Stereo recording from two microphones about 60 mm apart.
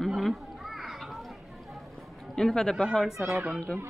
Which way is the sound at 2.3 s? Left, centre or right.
Centre.